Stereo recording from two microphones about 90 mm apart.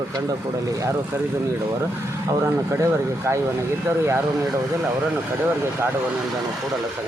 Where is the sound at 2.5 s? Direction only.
35° right (ahead or behind).